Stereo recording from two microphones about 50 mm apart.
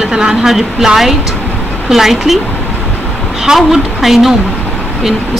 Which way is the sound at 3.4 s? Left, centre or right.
Centre.